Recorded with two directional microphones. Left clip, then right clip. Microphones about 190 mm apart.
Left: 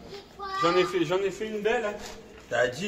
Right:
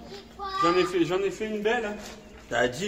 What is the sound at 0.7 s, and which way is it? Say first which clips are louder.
A man's voice: even; 10° left (ahead or behind).